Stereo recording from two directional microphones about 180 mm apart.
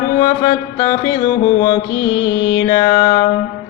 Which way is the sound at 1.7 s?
15° left (ahead or behind).